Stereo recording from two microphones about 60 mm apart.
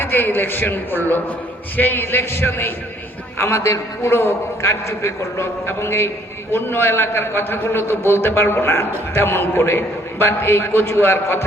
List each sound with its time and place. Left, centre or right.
0.0 s a man's voice: left
3.3 s a man's voice: left